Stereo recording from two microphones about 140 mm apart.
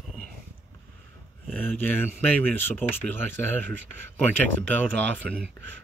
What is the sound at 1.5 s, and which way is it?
Speech, 15° left (ahead or behind).